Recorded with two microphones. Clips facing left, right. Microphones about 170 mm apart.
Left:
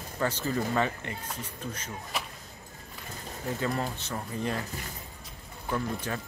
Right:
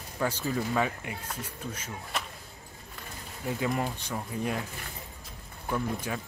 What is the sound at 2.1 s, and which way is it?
Vehicle, centre (ahead or behind).